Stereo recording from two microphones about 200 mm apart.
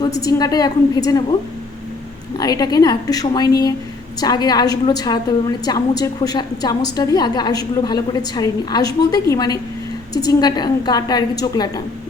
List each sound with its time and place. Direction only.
0.0 s a woman's voice: 15° left (ahead or behind)
2.4 s a woman's voice: 20° left (ahead or behind)